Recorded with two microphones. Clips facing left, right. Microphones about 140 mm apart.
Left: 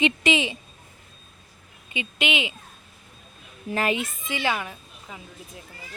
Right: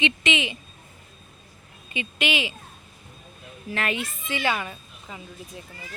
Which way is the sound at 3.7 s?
25° left (ahead or behind).